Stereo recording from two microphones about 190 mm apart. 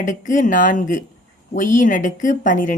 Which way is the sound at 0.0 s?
40° left (ahead or behind).